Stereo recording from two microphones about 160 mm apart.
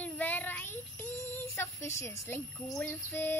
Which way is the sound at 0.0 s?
10° left (ahead or behind).